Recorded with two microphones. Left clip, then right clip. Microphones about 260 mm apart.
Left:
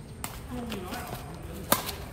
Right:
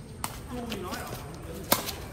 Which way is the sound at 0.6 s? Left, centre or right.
Centre.